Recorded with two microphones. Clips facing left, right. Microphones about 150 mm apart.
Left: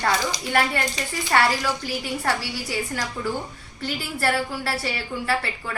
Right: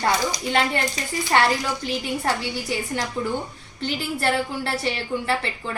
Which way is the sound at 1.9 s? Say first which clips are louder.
Right 1 dB; 20° right (ahead or behind).